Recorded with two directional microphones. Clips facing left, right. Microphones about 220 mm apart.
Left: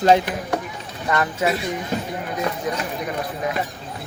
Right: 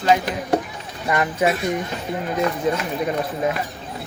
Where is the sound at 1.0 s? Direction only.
15° right (ahead or behind).